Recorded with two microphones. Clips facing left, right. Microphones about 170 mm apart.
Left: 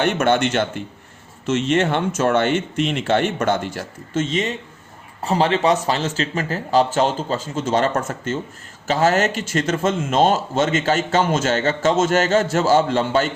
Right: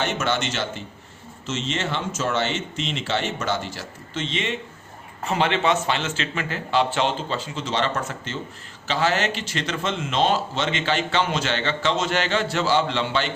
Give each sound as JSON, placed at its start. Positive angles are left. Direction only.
{"t": 0.0, "sound": "a man's voice", "side_deg": 55}